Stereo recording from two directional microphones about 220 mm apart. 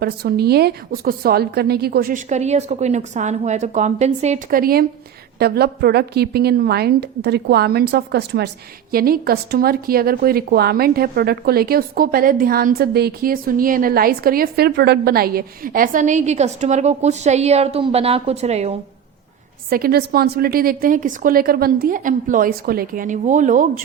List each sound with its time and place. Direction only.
0.0 s a woman's voice: 45° right (ahead or behind); by 18.8 s 30° right (ahead or behind)
19.7 s a woman's voice: 45° right (ahead or behind)